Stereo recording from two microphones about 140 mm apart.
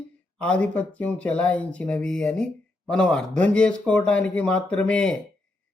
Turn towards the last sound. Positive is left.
turn(degrees=5)  # may be behind; listen again after turning